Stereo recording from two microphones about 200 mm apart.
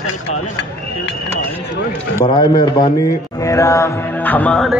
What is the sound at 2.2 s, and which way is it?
Speech, 20° left (ahead or behind).